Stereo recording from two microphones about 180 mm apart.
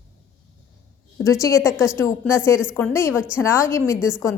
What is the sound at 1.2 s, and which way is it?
A woman's voice, 15° left (ahead or behind).